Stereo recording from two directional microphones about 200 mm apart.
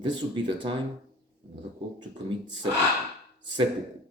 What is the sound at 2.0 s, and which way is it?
Speech, 25° right (ahead or behind).